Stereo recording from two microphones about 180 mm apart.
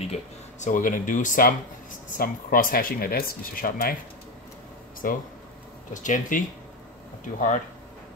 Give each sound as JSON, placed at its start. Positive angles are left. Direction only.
{"t": 0.1, "sound": "speech", "side_deg": 45}
{"t": 5.0, "sound": "speech", "side_deg": 50}